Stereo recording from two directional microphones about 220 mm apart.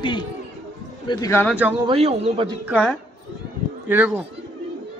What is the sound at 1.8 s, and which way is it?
Speech, 25° right (ahead or behind).